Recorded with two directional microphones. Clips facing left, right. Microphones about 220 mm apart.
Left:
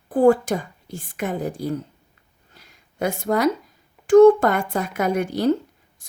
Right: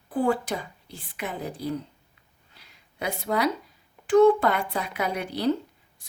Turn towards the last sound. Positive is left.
turn(degrees=45)  # may be behind; listen again after turning